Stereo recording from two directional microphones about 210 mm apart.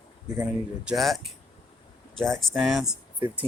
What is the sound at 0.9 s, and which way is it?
Speech, centre (ahead or behind).